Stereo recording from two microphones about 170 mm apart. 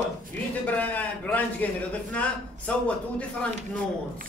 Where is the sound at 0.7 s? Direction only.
10° left (ahead or behind).